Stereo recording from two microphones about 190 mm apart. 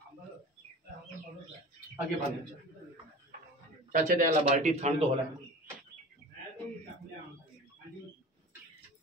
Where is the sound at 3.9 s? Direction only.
45° right (ahead or behind).